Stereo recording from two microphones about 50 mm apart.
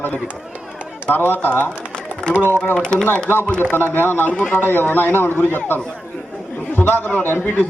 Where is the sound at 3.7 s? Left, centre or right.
Left.